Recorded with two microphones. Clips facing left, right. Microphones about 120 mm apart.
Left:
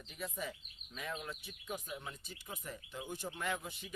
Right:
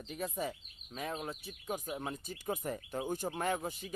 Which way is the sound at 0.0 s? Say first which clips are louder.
Right 5 dB; 45° right (ahead or behind).